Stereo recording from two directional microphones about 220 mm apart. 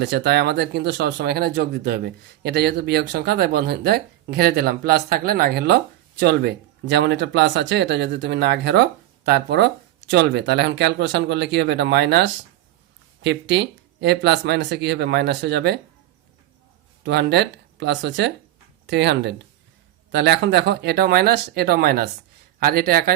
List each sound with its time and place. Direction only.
0.0 s speech: 50° right (ahead or behind)
17.0 s speech: 50° right (ahead or behind)